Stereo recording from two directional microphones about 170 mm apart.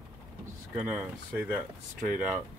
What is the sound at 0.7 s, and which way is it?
Speech, 10° right (ahead or behind).